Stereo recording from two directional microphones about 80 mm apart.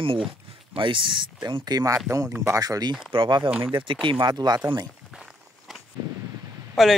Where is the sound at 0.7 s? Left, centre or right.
Right.